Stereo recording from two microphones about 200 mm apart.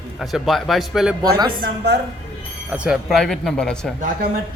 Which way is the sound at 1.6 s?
55° right (ahead or behind).